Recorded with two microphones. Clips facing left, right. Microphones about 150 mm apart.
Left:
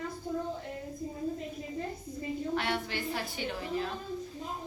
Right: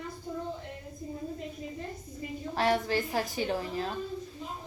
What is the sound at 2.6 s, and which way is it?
A woman's voice, 40° right (ahead or behind).